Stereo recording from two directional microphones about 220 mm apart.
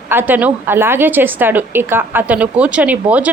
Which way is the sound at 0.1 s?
10° right (ahead or behind).